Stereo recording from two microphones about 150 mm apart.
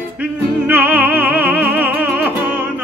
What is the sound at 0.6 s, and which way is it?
Music, 10° right (ahead or behind).